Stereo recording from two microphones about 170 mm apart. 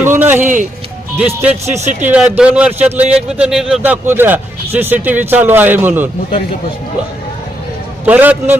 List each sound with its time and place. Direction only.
0.0 s music: 10° right (ahead or behind)
0.4 s music: 50° right (ahead or behind)
1.2 s speech: 10° right (ahead or behind)
1.7 s speech: 45° right (ahead or behind)
2.0 s speech: 10° right (ahead or behind)
8.0 s speech: 10° right (ahead or behind)